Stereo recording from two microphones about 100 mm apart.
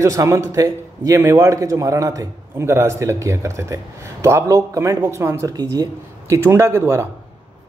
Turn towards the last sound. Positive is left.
turn(degrees=-25)  # may be behind; listen again after turning